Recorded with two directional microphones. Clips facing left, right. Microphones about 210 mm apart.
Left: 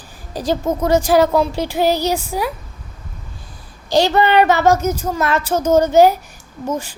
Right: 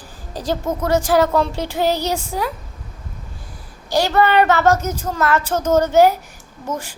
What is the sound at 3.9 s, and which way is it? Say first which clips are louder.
A child's voice: left 2 dB; 20° left (ahead or behind).